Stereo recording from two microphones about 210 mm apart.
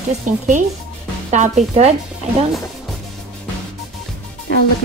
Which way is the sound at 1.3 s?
35° right (ahead or behind).